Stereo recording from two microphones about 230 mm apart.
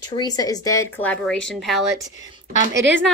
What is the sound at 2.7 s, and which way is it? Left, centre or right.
Speech, right.